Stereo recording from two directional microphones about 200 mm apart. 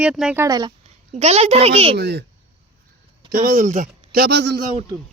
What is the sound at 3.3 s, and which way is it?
Speech, 40° right (ahead or behind).